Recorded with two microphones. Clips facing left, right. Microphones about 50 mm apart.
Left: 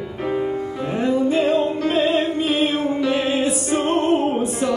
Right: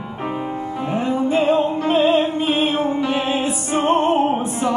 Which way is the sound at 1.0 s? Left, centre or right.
Right.